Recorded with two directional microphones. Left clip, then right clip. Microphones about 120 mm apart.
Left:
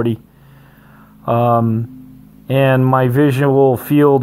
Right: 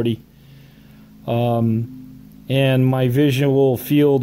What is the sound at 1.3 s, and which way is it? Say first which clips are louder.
Speech: left 6 dB; 15° right (ahead or behind).